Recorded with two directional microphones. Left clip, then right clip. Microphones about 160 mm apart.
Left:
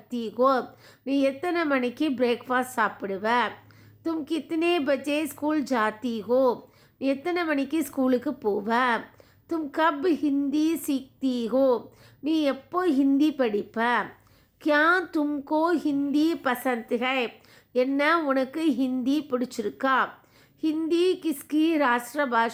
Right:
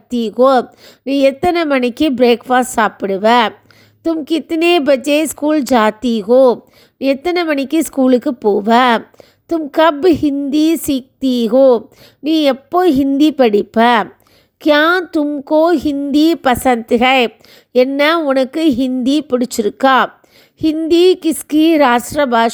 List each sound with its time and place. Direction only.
0.1 s a woman's voice: 40° right (ahead or behind)